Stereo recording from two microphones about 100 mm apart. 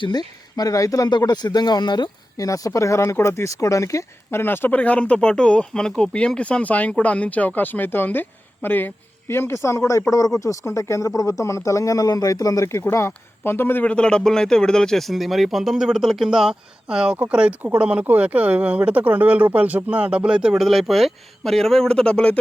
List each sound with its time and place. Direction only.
0.0 s speech: 45° left (ahead or behind); by 13.9 s 20° left (ahead or behind)
13.9 s speech: 10° left (ahead or behind)